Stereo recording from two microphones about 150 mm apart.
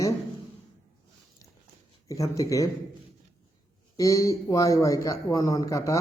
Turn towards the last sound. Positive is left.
turn(degrees=20)  # may be behind; listen again after turning